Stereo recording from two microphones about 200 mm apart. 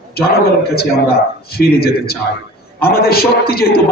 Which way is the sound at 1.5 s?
50° left (ahead or behind).